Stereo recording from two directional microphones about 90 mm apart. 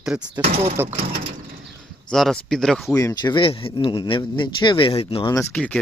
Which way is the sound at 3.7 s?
60° left (ahead or behind).